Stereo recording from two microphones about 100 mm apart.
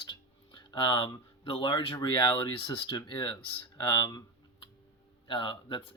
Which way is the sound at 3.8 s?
45° left (ahead or behind).